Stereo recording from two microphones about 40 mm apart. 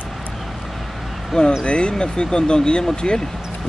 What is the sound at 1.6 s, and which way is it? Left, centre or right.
Speech, left.